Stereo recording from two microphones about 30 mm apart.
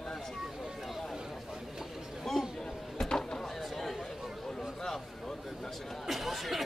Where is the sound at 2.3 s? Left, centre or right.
Centre.